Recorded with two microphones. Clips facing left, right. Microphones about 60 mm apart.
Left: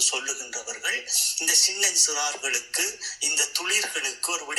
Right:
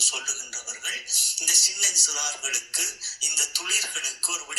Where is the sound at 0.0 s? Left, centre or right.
Left.